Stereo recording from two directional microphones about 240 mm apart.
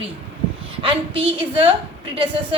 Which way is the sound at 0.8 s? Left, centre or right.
Right.